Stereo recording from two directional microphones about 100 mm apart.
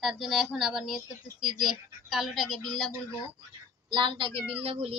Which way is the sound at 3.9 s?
55° right (ahead or behind).